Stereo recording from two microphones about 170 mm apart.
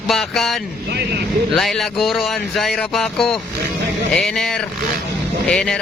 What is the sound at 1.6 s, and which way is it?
Speech, centre (ahead or behind).